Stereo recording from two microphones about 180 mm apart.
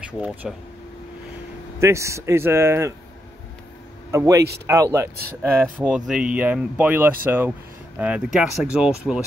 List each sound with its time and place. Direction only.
0.0 s speech: 5° right (ahead or behind)
1.8 s speech: 15° right (ahead or behind)
4.1 s speech: 15° right (ahead or behind)